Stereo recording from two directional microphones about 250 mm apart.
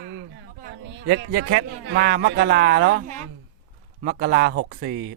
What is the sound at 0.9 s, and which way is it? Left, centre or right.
A man's voice, right.